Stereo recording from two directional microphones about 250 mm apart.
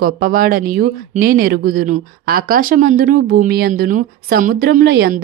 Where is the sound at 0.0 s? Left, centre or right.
Right.